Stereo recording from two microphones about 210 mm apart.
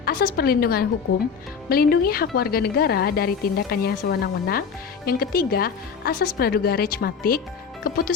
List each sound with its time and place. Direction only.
0.0 s a woman's voice: 45° left (ahead or behind)